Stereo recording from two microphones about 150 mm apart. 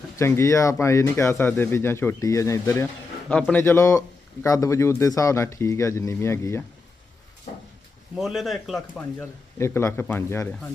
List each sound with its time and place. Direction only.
0.2 s speech: 20° left (ahead or behind)
3.2 s speech: 10° left (ahead or behind)
8.1 s speech: centre (ahead or behind)
9.0 s speech: 15° left (ahead or behind)